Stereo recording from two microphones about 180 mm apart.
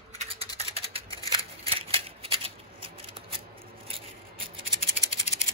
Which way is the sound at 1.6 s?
30° right (ahead or behind).